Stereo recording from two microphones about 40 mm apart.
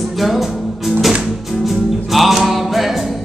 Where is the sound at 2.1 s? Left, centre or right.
Centre.